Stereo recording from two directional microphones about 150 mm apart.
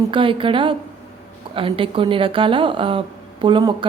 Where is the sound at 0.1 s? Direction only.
35° right (ahead or behind).